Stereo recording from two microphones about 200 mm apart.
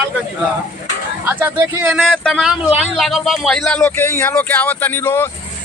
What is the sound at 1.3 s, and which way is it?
Speech, 10° right (ahead or behind).